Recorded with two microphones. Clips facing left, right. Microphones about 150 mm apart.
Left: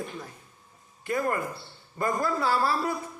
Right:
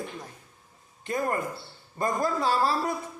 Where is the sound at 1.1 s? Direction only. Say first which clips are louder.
Even; 20° right (ahead or behind).